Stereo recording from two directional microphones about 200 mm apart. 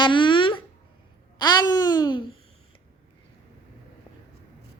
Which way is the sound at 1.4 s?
20° left (ahead or behind).